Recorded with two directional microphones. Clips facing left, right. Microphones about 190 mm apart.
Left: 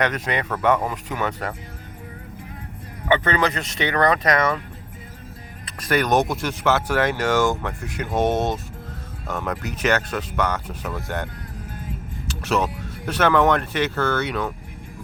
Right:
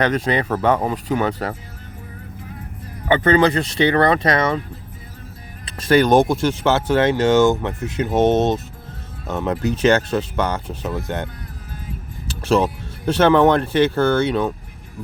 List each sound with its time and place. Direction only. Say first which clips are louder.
0.0 s speech: right 5 dB; 30° right (ahead or behind)
3.1 s speech: right 5 dB; 35° right (ahead or behind)
5.6 s speech: right 7 dB; 30° right (ahead or behind)
12.3 s speech: right 5 dB; 30° right (ahead or behind)